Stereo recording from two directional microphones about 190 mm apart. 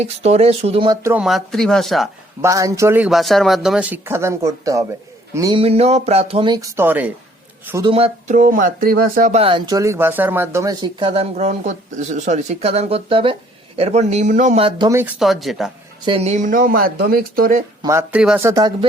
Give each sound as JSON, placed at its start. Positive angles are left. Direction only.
{"t": 0.0, "sound": "speech", "side_deg": -35}
{"t": 1.0, "sound": "speech", "side_deg": -5}
{"t": 2.4, "sound": "speech", "side_deg": -15}
{"t": 5.5, "sound": "speech", "side_deg": -30}
{"t": 7.9, "sound": "speech", "side_deg": -35}
{"t": 9.4, "sound": "speech", "side_deg": -25}
{"t": 14.8, "sound": "speech", "side_deg": -15}
{"t": 15.2, "sound": "speech", "side_deg": 0}
{"t": 16.0, "sound": "speech", "side_deg": -35}
{"t": 17.8, "sound": "speech", "side_deg": -10}
{"t": 18.4, "sound": "speech", "side_deg": -20}